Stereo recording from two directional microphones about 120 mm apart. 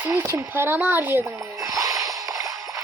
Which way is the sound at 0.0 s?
20° right (ahead or behind).